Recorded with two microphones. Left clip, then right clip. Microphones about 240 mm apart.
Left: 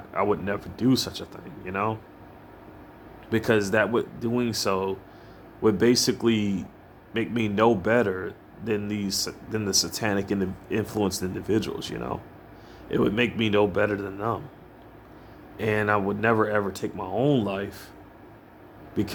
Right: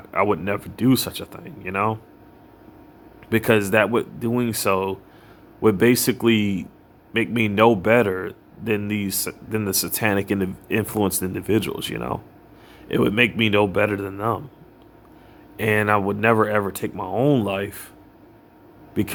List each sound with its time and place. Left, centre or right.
0.1 s speech: right
3.2 s a man's voice: right
15.5 s speech: right